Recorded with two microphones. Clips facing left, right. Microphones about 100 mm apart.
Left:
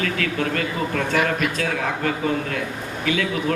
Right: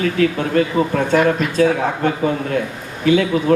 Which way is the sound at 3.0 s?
30° right (ahead or behind).